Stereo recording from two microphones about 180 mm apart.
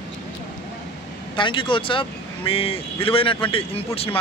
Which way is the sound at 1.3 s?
25° left (ahead or behind).